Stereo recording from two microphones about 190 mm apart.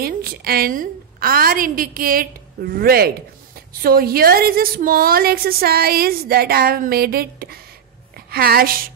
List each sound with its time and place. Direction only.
0.0 s a woman's voice: 50° right (ahead or behind)